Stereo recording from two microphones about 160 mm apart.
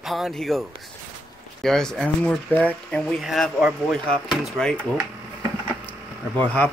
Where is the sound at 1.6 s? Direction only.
5° left (ahead or behind).